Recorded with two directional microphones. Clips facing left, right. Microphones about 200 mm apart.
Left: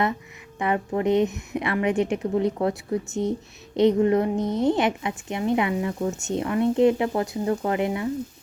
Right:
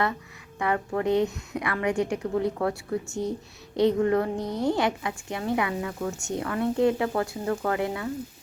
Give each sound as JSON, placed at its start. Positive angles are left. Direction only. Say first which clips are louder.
{"t": 0.6, "sound": "a woman's voice", "louder": "left 2 dB", "side_deg": 20}